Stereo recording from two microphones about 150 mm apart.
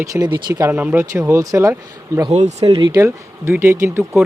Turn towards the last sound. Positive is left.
turn(degrees=-15)  # may be behind; listen again after turning